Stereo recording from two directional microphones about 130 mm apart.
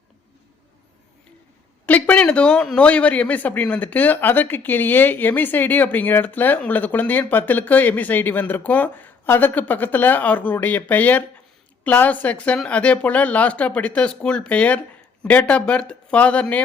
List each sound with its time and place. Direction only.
1.9 s a man's voice: 10° left (ahead or behind)